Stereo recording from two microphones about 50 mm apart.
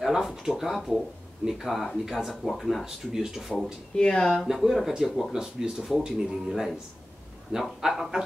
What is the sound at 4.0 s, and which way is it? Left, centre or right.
Speech, centre.